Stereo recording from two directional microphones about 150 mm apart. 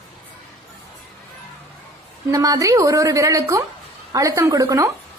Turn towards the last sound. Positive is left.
turn(degrees=-25)  # may be behind; listen again after turning